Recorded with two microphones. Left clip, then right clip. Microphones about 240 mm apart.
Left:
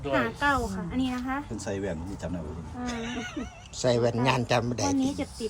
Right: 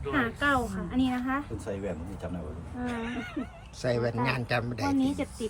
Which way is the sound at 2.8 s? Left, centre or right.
Centre.